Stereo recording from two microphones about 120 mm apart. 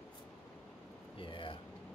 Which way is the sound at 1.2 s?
45° left (ahead or behind).